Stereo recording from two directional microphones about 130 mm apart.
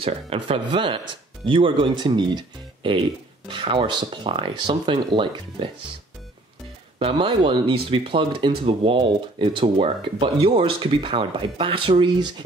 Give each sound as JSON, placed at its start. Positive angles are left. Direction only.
{"t": 0.0, "sound": "speech", "side_deg": -45}
{"t": 7.0, "sound": "speech", "side_deg": -45}
{"t": 9.8, "sound": "speech", "side_deg": -50}